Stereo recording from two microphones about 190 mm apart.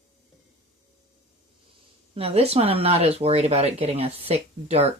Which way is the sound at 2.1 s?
30° right (ahead or behind).